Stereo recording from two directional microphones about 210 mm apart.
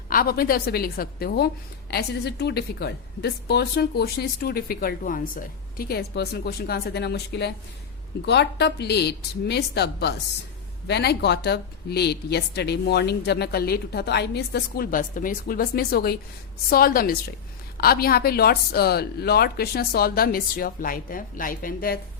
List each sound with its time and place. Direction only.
0.1 s a woman's voice: 45° left (ahead or behind)